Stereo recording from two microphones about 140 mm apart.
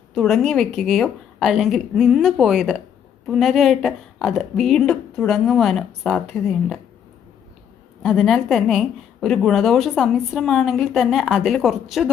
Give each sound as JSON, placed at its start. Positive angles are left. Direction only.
{"t": 0.1, "sound": "a woman's voice", "side_deg": 0}
{"t": 8.0, "sound": "a woman's voice", "side_deg": -5}